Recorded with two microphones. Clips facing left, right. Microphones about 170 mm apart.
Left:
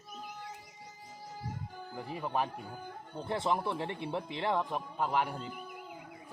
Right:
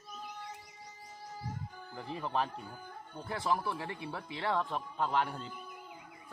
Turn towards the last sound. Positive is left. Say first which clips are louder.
# left 1 dB
turn(degrees=10)  # may be behind; listen again after turning